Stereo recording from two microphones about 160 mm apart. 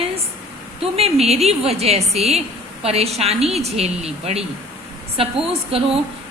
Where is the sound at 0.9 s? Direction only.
40° right (ahead or behind).